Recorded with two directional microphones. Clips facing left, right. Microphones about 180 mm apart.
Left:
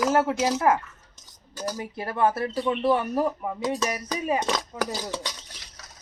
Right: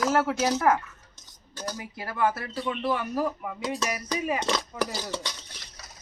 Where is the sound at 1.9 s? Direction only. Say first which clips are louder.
Left 3 dB; 25° left (ahead or behind).